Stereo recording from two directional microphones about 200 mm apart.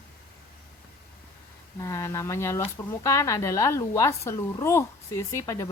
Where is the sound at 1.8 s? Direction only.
15° left (ahead or behind).